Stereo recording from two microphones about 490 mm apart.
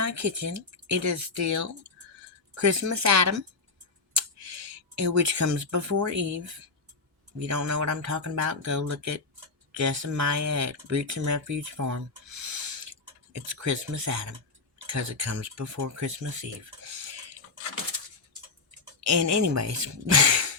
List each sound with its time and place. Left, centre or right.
0.0 s speech: right
4.9 s speech: right
18.9 s speech: right